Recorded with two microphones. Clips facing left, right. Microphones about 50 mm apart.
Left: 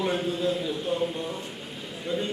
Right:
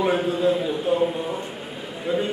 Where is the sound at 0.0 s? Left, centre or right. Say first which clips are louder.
Right 6 dB; centre.